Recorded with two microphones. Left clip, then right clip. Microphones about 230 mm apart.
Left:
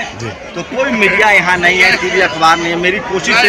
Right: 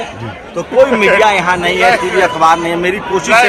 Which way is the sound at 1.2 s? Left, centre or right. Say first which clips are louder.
Left 2 dB; centre.